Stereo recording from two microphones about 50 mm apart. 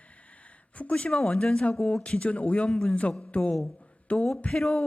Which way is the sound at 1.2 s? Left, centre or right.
Centre.